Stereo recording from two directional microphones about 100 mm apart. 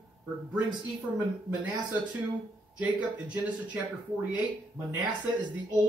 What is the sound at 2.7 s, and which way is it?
Speech, 15° right (ahead or behind).